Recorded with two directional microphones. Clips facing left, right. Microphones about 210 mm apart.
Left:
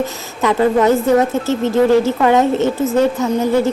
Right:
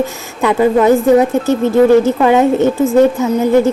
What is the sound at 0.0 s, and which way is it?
Speech, 15° right (ahead or behind).